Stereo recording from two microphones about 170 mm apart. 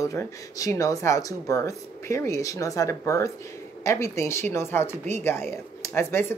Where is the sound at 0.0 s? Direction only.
20° left (ahead or behind).